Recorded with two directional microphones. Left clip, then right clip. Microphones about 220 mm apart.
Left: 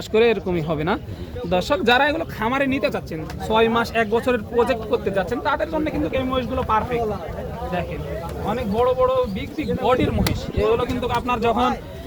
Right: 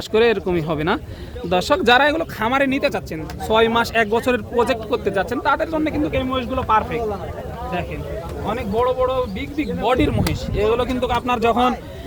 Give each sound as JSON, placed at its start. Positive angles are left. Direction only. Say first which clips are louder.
{"t": 0.1, "sound": "a man's voice", "louder": "right 1 dB", "side_deg": -25}
{"t": 8.4, "sound": "a man's voice", "louder": "even", "side_deg": -50}